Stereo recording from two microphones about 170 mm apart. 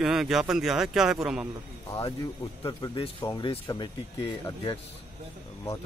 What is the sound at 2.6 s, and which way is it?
Speech, 30° left (ahead or behind).